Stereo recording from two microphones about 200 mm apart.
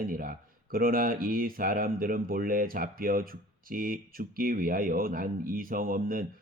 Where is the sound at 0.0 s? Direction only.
45° right (ahead or behind).